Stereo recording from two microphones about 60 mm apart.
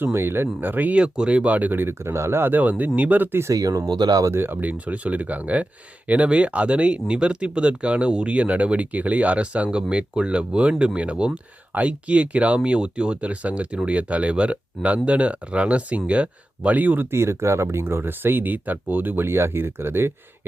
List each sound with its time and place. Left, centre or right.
0.0 s speech: right
3.5 s speech: right
4.4 s speech: right
4.7 s speech: right
17.1 s speech: right